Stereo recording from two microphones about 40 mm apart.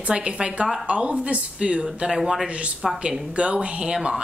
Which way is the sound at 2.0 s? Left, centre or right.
Centre.